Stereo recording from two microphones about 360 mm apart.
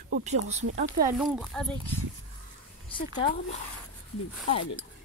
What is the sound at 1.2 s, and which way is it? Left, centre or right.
Speech, centre.